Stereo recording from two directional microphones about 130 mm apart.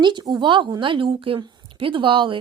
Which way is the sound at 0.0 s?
35° right (ahead or behind).